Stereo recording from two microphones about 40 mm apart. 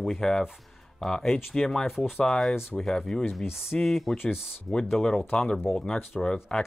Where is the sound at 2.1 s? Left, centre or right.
Centre.